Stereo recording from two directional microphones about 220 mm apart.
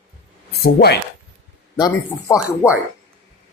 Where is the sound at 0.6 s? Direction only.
45° left (ahead or behind).